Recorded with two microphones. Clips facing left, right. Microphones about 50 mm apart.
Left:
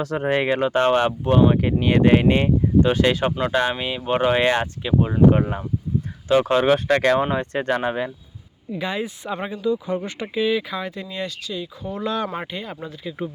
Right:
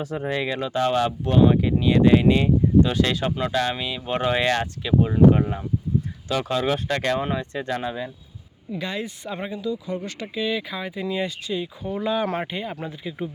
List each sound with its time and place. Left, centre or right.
0.2 s speech: left
1.8 s speech: left
7.0 s speech: left
7.3 s speech: left
8.7 s speech: centre
9.6 s speech: left
10.4 s speech: centre
11.4 s speech: right
11.8 s speech: centre